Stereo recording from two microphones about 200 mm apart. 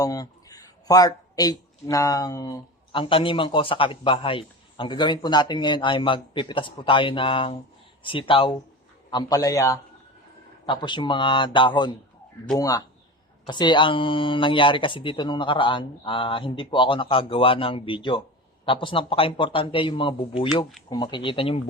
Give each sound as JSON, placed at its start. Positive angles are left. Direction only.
{"t": 0.0, "sound": "a man's voice", "side_deg": 20}